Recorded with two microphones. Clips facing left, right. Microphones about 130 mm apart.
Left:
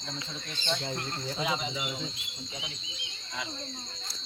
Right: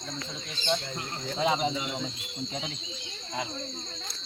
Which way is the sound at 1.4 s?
30° right (ahead or behind).